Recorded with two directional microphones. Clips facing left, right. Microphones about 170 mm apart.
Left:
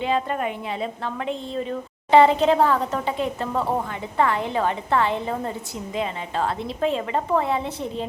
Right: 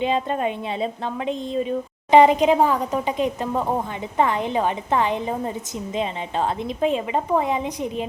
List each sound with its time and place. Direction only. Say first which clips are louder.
0.0 s a woman's voice: right 2 dB; 20° right (ahead or behind)